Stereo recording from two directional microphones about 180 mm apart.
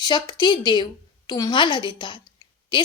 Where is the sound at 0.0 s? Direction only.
25° left (ahead or behind).